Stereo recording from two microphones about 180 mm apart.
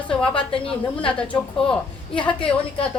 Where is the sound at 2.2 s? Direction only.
25° left (ahead or behind).